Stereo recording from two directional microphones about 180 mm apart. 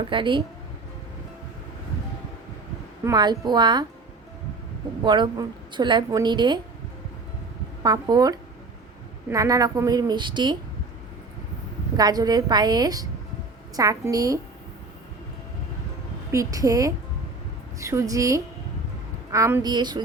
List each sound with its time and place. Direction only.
0.1 s a woman's voice: 25° right (ahead or behind)
3.0 s a woman's voice: 20° right (ahead or behind)
5.0 s a woman's voice: 25° right (ahead or behind)
7.8 s a woman's voice: 20° right (ahead or behind)
11.9 s a woman's voice: 20° right (ahead or behind)
16.3 s a woman's voice: 20° right (ahead or behind)